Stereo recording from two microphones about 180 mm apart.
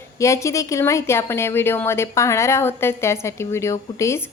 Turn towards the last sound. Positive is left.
turn(degrees=15)  # may be behind; listen again after turning